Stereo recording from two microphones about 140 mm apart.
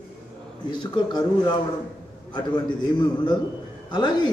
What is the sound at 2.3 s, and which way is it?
Speech, 30° left (ahead or behind).